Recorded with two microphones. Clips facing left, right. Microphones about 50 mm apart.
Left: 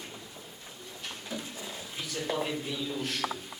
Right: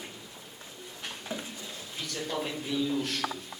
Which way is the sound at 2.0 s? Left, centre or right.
Centre.